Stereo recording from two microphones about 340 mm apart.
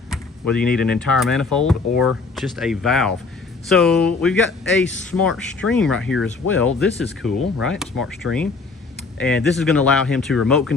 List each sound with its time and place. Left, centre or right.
0.1 s speech: centre